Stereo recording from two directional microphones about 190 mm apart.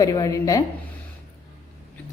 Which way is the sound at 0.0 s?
20° left (ahead or behind).